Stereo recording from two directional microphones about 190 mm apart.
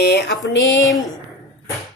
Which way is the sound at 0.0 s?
60° left (ahead or behind).